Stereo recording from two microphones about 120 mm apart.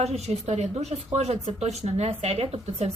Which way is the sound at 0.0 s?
65° right (ahead or behind).